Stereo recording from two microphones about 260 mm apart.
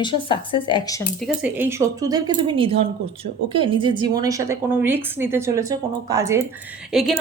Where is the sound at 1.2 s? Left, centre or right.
Centre.